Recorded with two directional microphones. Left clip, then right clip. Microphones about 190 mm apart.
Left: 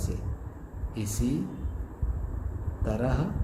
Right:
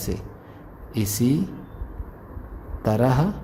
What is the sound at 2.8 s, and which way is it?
Speech, 50° right (ahead or behind).